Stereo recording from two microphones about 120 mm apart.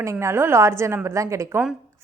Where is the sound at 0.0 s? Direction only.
25° right (ahead or behind).